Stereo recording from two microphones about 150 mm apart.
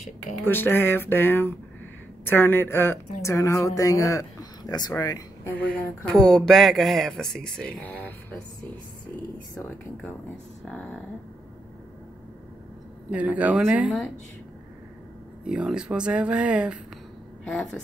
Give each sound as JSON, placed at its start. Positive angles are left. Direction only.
{"t": 0.5, "sound": "a woman's voice", "side_deg": 15}
{"t": 5.5, "sound": "speech", "side_deg": 10}
{"t": 10.7, "sound": "speech", "side_deg": 10}
{"t": 13.1, "sound": "speech", "side_deg": -10}
{"t": 15.4, "sound": "speech", "side_deg": -5}
{"t": 17.5, "sound": "speech", "side_deg": 0}